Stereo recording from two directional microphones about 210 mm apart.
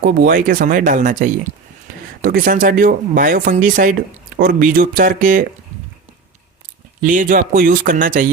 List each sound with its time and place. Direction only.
0.0 s speech: 45° right (ahead or behind)
7.0 s speech: 40° right (ahead or behind)